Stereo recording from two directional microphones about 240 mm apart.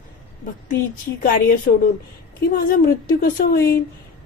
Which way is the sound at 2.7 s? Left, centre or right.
Left.